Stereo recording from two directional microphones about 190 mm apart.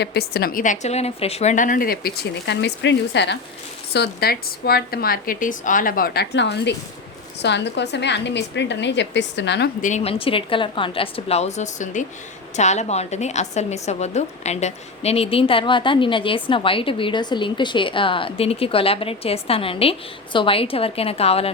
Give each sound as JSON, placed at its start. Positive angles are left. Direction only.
{"t": 0.0, "sound": "a woman's voice", "side_deg": 60}
{"t": 9.8, "sound": "a woman's voice", "side_deg": 35}